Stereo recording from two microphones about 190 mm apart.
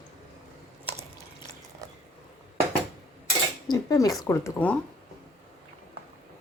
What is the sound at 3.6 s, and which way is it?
Speech, 20° left (ahead or behind).